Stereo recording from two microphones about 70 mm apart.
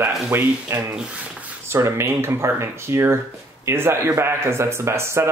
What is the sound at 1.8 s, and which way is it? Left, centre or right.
Speech, right.